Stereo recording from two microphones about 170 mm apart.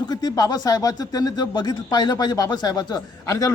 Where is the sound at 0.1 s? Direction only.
25° left (ahead or behind).